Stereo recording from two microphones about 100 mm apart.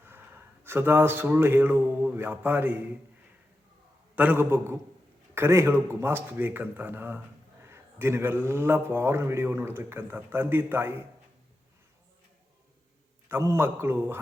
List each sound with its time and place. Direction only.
0.6 s a man's voice: 25° right (ahead or behind)
4.1 s a man's voice: 15° right (ahead or behind)
13.2 s a man's voice: 25° right (ahead or behind)